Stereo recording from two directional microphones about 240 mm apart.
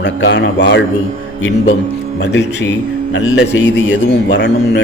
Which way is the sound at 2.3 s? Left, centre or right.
Left.